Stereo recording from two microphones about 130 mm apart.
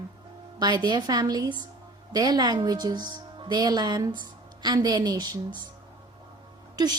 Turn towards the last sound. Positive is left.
turn(degrees=-30)  # may be behind; listen again after turning